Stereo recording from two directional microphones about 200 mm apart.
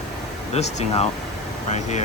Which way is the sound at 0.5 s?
35° left (ahead or behind).